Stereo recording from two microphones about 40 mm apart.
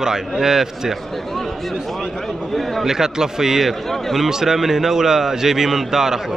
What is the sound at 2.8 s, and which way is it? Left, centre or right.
A man's voice, centre.